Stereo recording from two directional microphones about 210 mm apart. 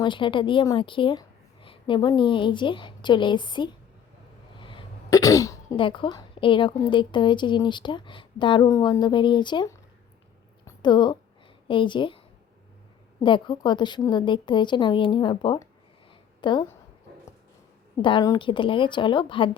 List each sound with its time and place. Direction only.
0.0 s a woman's voice: 25° left (ahead or behind)
17.9 s a woman's voice: 20° left (ahead or behind)